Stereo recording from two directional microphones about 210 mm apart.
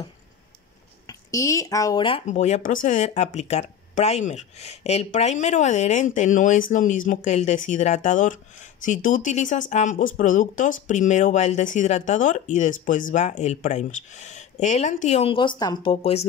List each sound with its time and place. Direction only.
1.0 s speech: 15° left (ahead or behind)